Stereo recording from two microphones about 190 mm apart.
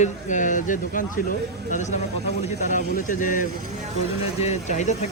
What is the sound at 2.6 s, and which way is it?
Speech, 40° left (ahead or behind).